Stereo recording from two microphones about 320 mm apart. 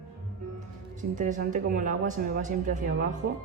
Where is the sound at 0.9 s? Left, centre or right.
Right.